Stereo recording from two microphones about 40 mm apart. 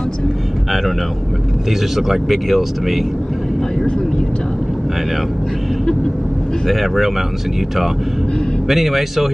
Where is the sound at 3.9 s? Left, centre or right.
Centre.